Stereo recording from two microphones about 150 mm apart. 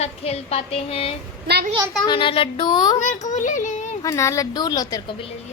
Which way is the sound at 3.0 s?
55° left (ahead or behind).